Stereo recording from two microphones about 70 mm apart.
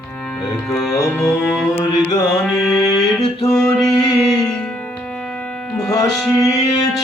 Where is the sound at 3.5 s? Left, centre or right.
Centre.